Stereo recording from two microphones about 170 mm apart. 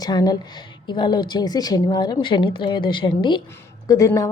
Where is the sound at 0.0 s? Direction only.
25° left (ahead or behind).